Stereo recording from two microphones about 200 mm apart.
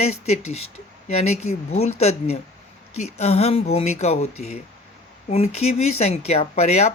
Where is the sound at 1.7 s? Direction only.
30° left (ahead or behind).